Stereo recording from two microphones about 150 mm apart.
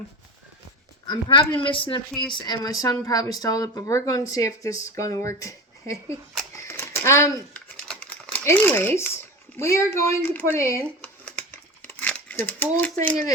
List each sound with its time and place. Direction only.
1.0 s a woman's voice: 30° left (ahead or behind)
6.7 s a sound: 15° left (ahead or behind)
7.5 s crumpling: 10° left (ahead or behind)
9.6 s speech: 20° left (ahead or behind)
11.0 s crumpling: 10° left (ahead or behind)